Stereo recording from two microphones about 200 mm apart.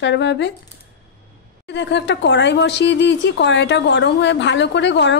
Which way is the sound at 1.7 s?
60° left (ahead or behind).